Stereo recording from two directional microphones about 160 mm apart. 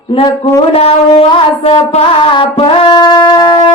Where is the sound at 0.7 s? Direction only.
40° left (ahead or behind).